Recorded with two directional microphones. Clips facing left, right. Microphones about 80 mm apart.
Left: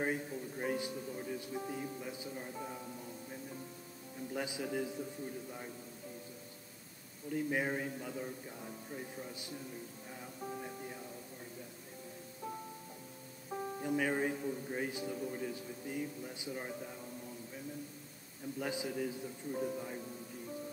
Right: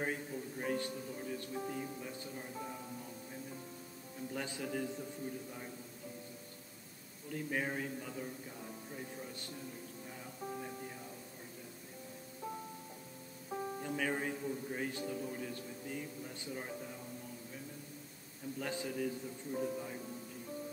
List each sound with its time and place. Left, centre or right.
0.0 s speech: centre
4.3 s speech: centre
7.3 s speech: centre
10.4 s music: centre
13.5 s speech: centre
18.6 s speech: centre